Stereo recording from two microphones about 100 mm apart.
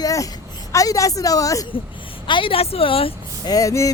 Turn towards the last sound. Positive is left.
turn(degrees=30)  # may be behind; listen again after turning